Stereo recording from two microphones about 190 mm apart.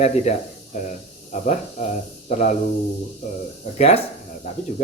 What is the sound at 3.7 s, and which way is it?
Speech, 35° left (ahead or behind).